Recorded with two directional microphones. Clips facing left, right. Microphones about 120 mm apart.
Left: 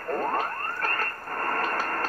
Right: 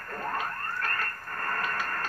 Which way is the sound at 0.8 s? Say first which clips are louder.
Left 4 dB; 40° left (ahead or behind).